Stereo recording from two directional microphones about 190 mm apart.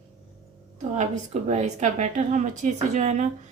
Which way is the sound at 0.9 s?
35° right (ahead or behind).